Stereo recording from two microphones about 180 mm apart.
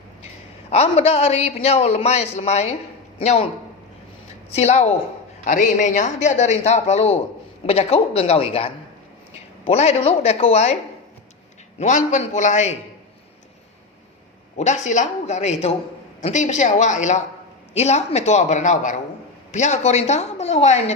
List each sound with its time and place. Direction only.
0.7 s a man's voice: 35° left (ahead or behind)
4.5 s a man's voice: 35° left (ahead or behind)
11.8 s a man's voice: 40° left (ahead or behind)
14.5 s a man's voice: 40° left (ahead or behind)